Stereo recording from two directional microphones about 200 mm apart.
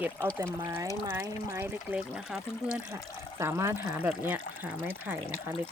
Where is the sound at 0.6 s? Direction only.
20° right (ahead or behind).